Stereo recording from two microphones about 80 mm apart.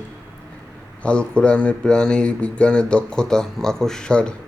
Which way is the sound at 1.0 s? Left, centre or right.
Centre.